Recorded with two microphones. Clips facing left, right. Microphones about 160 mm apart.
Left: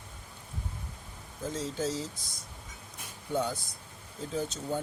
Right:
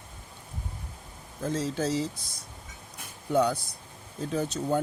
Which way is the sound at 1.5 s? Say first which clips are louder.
Right 5 dB; 70° right (ahead or behind).